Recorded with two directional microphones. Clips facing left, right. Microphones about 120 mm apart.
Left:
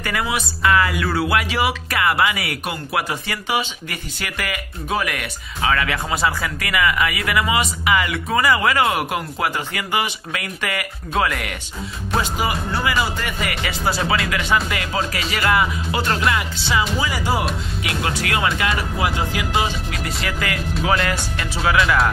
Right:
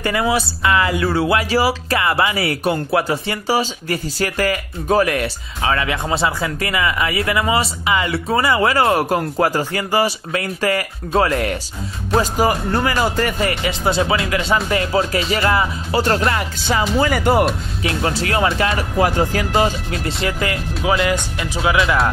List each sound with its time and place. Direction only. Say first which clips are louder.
0.0 s speech: right 5 dB; 25° right (ahead or behind)
16.3 s music: right 2 dB; 45° right (ahead or behind)
17.0 s speech: right 7 dB; 55° right (ahead or behind)
17.8 s speech: right 4 dB; 30° right (ahead or behind)
20.8 s speech: right 3 dB; 20° right (ahead or behind)